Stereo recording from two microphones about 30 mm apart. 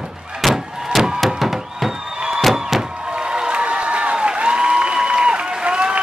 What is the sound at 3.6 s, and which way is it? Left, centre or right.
Applause, right.